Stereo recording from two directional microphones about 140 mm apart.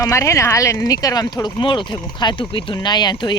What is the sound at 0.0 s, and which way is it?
Speech, 20° left (ahead or behind).